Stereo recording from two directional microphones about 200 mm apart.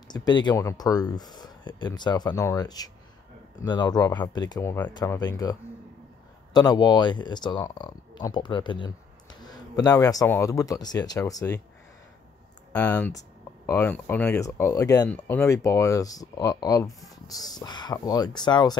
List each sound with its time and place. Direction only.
0.1 s speech: 20° left (ahead or behind)
12.7 s speech: 10° left (ahead or behind)